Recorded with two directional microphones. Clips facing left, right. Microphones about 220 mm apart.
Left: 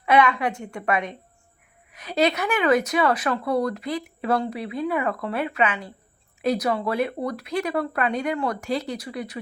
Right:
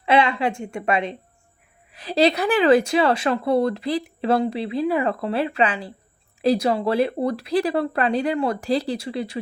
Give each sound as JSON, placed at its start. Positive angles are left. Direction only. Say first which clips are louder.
{"t": 0.0, "sound": "speech", "louder": "right 1 dB", "side_deg": -25}